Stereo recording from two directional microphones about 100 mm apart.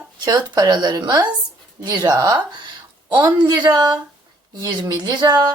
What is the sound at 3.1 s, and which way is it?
A woman's voice, 45° right (ahead or behind).